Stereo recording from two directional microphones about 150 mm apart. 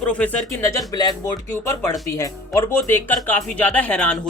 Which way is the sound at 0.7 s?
25° left (ahead or behind).